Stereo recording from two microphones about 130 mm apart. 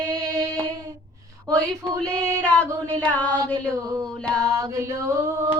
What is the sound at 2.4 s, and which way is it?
Mantra, 10° left (ahead or behind).